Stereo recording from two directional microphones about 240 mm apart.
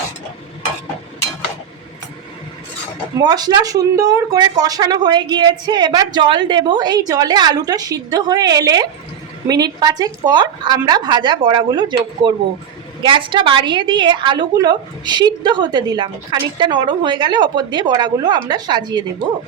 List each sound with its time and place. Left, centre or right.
3.2 s a woman's voice: centre